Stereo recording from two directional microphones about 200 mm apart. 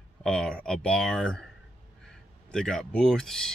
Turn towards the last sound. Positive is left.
turn(degrees=5)  # may be behind; listen again after turning